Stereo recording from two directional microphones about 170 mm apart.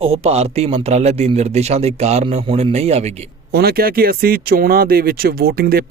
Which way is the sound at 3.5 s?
65° right (ahead or behind).